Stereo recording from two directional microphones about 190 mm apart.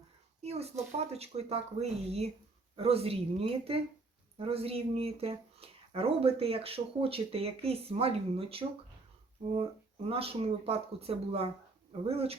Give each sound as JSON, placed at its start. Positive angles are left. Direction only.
{"t": 0.4, "sound": "speech", "side_deg": -35}